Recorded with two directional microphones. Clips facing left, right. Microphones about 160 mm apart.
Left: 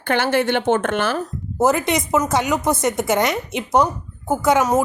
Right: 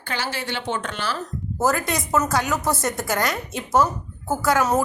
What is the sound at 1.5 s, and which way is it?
A woman's voice, 20° left (ahead or behind).